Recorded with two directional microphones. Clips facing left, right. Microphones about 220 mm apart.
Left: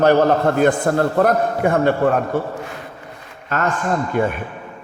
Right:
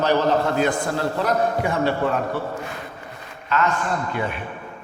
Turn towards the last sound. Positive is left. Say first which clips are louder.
# left 6 dB
turn(degrees=45)  # may be behind; listen again after turning